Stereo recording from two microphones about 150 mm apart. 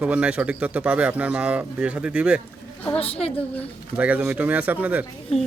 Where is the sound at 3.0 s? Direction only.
40° left (ahead or behind).